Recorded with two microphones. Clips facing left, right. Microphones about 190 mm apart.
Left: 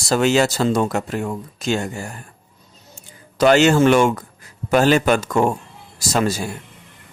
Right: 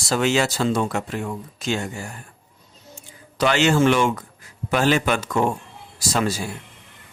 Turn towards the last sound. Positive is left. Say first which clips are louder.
# left 3 dB
turn(degrees=45)  # may be behind; listen again after turning